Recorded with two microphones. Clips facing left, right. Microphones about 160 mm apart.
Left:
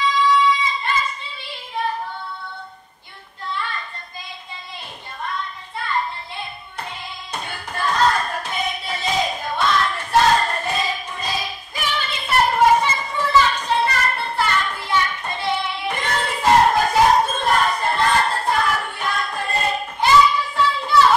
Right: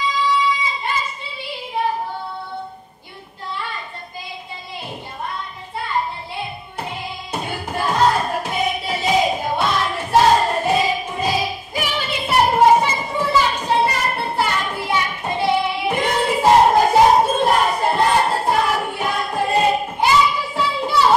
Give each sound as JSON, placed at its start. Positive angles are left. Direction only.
{"t": 1.4, "sound": "child singing", "side_deg": -10}
{"t": 3.5, "sound": "child singing", "side_deg": -10}
{"t": 5.8, "sound": "thump", "side_deg": -10}
{"t": 7.9, "sound": "music", "side_deg": -20}
{"t": 13.7, "sound": "child singing", "side_deg": -15}
{"t": 16.8, "sound": "a sound", "side_deg": -20}
{"t": 17.3, "sound": "music", "side_deg": -10}